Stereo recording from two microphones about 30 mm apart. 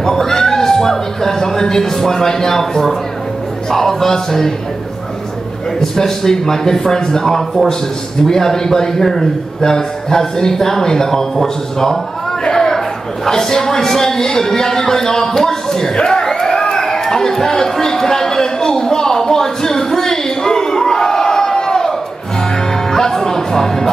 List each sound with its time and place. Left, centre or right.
0.0 s a sound: centre
3.7 s speech: centre
5.8 s a man's voice: centre
16.1 s crowd: centre
16.7 s a sound: centre
22.8 s music: centre